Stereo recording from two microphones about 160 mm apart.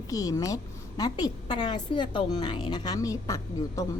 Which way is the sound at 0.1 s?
20° left (ahead or behind).